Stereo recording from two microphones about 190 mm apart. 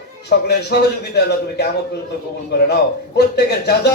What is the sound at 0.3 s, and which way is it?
Speech, 60° left (ahead or behind).